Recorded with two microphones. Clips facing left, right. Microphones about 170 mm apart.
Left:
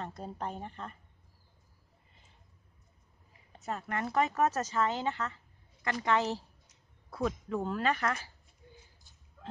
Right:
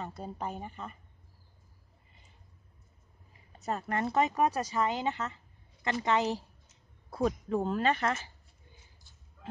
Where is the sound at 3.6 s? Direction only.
35° right (ahead or behind); by 6.4 s 15° right (ahead or behind).